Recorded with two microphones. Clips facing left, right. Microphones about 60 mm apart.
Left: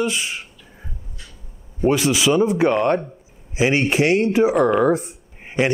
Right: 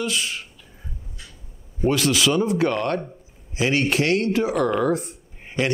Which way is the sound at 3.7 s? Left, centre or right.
Centre.